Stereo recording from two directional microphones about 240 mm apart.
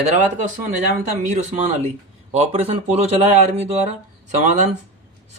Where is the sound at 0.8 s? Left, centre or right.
Right.